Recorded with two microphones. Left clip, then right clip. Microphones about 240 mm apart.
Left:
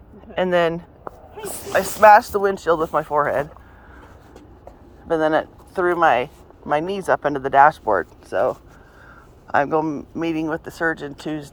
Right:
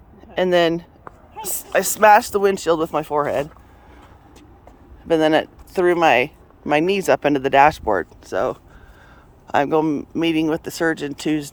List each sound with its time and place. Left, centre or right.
0.3 s speech: right
5.0 s speech: right